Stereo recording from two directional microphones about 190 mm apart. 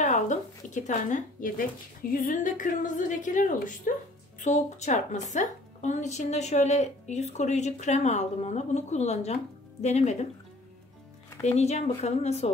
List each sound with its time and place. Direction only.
0.0 s a woman's voice: 40° left (ahead or behind)
11.4 s a woman's voice: 35° left (ahead or behind)